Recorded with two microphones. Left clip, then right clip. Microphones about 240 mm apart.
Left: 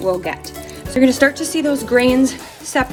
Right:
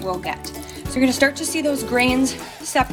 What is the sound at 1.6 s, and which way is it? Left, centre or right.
Speech, right.